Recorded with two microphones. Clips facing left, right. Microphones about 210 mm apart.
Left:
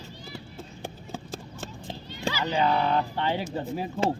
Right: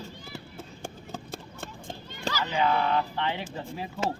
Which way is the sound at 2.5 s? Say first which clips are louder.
Left 1 dB; 35° left (ahead or behind).